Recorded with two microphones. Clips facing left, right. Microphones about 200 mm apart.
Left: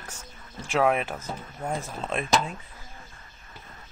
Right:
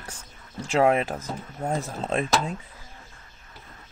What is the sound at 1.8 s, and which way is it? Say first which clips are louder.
Speech: right 4 dB; 35° right (ahead or behind).